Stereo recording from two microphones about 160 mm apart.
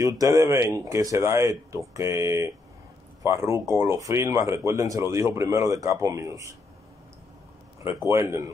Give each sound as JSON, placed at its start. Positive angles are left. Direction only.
{"t": 0.0, "sound": "speech", "side_deg": -20}
{"t": 8.1, "sound": "speech", "side_deg": -15}